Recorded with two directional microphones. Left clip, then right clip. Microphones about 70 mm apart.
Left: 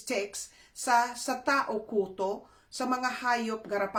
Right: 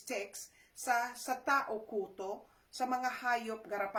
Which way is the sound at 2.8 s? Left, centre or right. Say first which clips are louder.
Left 4 dB; left.